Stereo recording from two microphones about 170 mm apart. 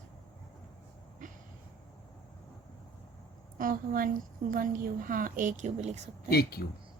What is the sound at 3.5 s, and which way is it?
A woman's voice, 55° right (ahead or behind).